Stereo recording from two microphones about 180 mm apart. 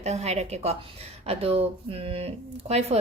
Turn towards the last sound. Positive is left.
turn(degrees=-35)  # may be behind; listen again after turning